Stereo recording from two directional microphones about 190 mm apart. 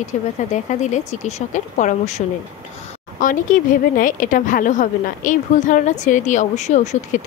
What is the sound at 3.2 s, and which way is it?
A woman's voice, 45° left (ahead or behind).